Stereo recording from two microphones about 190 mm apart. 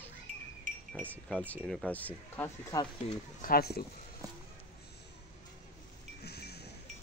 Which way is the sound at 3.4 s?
55° left (ahead or behind).